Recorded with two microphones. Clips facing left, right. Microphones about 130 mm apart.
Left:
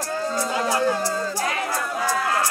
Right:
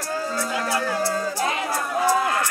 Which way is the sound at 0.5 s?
25° left (ahead or behind).